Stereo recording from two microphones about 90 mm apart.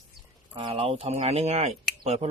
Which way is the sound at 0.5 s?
75° right (ahead or behind).